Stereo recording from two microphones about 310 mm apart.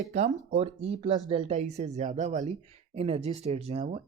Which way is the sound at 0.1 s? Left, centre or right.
Right.